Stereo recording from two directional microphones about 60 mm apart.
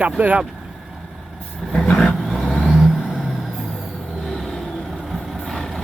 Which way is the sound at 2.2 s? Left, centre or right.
Centre.